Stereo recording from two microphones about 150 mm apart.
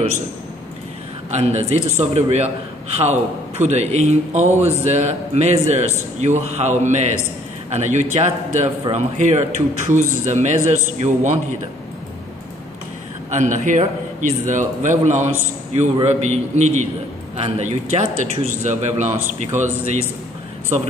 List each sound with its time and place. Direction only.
1.3 s a man's voice: 45° right (ahead or behind)
13.3 s a man's voice: 55° right (ahead or behind)